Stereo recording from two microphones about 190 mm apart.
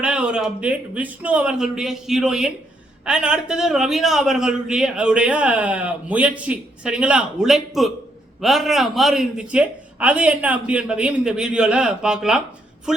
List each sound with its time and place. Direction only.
0.0 s a man's voice: 5° right (ahead or behind)